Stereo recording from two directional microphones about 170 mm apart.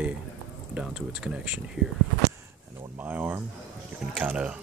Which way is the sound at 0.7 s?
5° right (ahead or behind).